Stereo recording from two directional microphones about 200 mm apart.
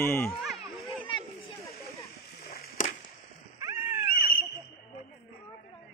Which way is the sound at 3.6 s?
10° right (ahead or behind).